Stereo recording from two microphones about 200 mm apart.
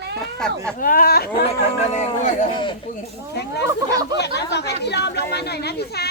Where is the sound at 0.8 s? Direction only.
45° left (ahead or behind).